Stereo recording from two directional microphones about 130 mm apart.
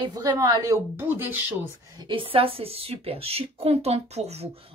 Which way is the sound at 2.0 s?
40° right (ahead or behind).